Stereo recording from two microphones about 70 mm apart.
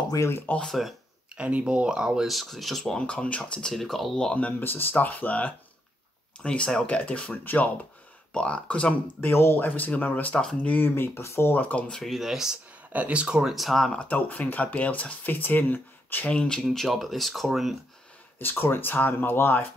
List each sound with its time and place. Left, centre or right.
0.7 s speech: centre
1.3 s speech: centre
9.0 s speech: left
9.7 s speech: left
11.5 s speech: left
11.9 s speech: centre
12.9 s speech: centre
13.9 s speech: left
16.3 s speech: centre
16.6 s speech: centre
18.4 s speech: left